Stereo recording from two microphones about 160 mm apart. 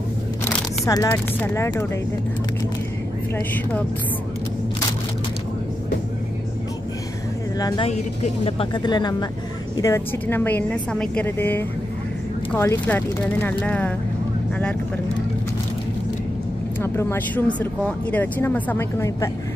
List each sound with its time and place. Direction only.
0.8 s speech: 20° left (ahead or behind)
7.5 s a woman's voice: 25° left (ahead or behind)
7.8 s speech: 40° left (ahead or behind)
8.7 s speech: 25° left (ahead or behind); by 13.9 s 10° left (ahead or behind)
16.8 s speech: 15° left (ahead or behind)